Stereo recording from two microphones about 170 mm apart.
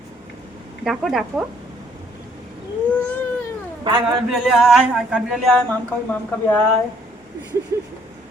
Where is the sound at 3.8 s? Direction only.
25° right (ahead or behind).